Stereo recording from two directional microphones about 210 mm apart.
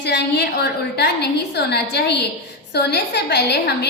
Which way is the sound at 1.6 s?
50° left (ahead or behind).